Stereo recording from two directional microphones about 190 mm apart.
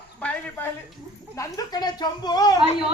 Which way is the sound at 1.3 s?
20° left (ahead or behind).